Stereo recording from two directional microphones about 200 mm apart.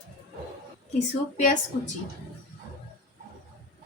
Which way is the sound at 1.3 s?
40° left (ahead or behind).